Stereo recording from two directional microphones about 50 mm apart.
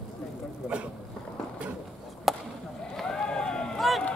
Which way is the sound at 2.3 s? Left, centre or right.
Centre.